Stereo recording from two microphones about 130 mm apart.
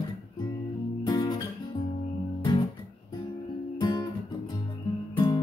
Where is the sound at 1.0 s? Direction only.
35° left (ahead or behind).